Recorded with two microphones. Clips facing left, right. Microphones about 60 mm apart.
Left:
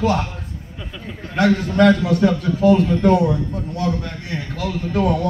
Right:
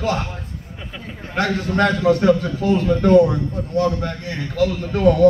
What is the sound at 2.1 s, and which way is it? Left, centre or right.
A man's voice, right.